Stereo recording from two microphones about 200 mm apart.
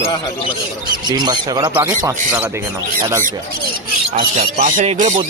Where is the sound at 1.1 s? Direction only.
20° right (ahead or behind).